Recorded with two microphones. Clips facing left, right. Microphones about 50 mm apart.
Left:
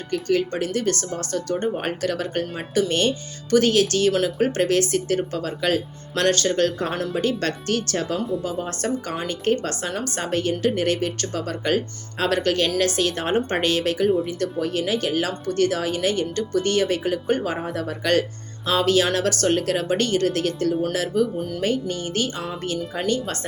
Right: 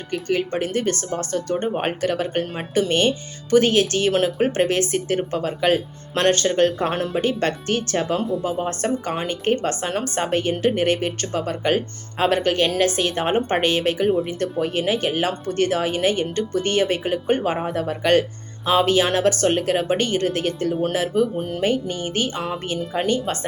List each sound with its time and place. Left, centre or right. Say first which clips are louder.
0.1 s speech: left 1 dB; right